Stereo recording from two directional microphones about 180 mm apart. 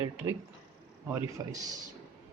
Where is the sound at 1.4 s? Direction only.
20° right (ahead or behind).